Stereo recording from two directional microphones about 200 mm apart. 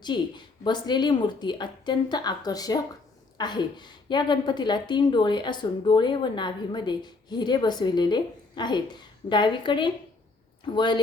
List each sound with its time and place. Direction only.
0.0 s a woman's voice: 20° left (ahead or behind)